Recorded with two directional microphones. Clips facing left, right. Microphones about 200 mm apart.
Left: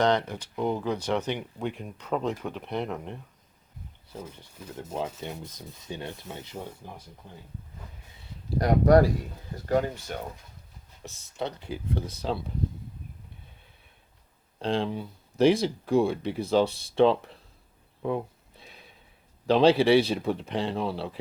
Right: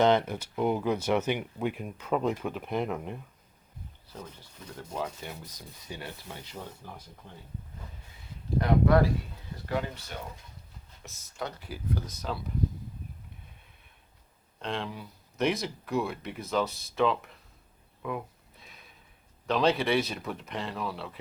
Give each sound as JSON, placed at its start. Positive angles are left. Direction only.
{"t": 0.0, "sound": "speech", "side_deg": -5}
{"t": 4.8, "sound": "speech", "side_deg": 25}
{"t": 8.5, "sound": "speech", "side_deg": 40}
{"t": 11.0, "sound": "speech", "side_deg": 25}
{"t": 14.6, "sound": "speech", "side_deg": 30}
{"t": 18.6, "sound": "snort", "side_deg": 30}
{"t": 19.5, "sound": "speech", "side_deg": 30}